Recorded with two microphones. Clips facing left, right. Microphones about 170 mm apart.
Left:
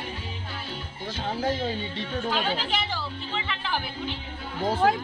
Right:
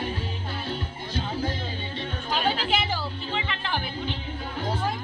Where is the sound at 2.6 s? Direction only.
10° right (ahead or behind).